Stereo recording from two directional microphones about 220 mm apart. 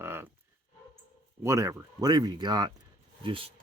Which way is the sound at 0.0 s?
10° right (ahead or behind).